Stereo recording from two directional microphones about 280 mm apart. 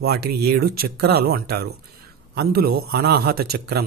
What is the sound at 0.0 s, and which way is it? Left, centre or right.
A man's voice, right.